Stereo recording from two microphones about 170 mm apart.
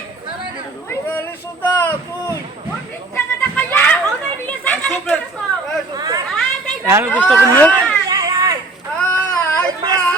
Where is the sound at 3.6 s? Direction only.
10° left (ahead or behind).